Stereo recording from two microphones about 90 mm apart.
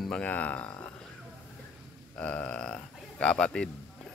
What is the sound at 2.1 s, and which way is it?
A man's voice, 15° left (ahead or behind).